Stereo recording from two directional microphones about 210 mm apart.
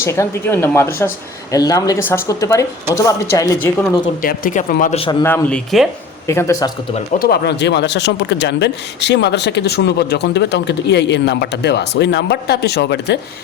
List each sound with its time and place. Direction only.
0.0 s a woman's voice: 10° left (ahead or behind)
4.2 s speech: 40° left (ahead or behind)
5.2 s speech: 5° left (ahead or behind)
6.2 s a woman's voice: 10° left (ahead or behind)
7.2 s speech: 50° left (ahead or behind)